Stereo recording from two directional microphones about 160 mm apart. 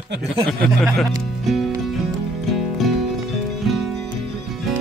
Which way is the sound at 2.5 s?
Centre (ahead or behind).